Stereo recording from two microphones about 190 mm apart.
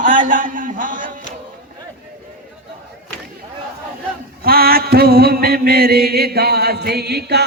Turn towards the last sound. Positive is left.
turn(degrees=-60)  # may be behind; listen again after turning